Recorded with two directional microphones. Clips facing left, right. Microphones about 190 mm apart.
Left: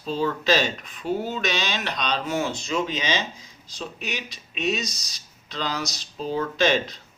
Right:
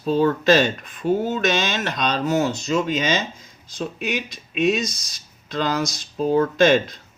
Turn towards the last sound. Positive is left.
turn(degrees=-50)  # may be behind; listen again after turning